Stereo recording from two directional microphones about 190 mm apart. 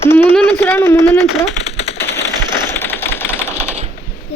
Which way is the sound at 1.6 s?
30° left (ahead or behind).